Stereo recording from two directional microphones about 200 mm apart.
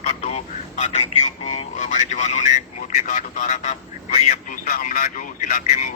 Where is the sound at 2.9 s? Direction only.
40° left (ahead or behind).